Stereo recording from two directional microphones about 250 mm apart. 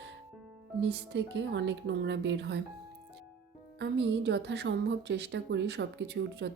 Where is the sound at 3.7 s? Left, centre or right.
Right.